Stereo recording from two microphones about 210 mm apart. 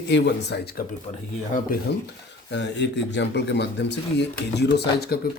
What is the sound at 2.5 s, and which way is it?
Speech, 55° left (ahead or behind).